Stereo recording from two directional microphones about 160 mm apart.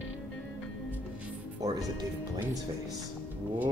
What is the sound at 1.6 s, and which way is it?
Speech, 25° right (ahead or behind).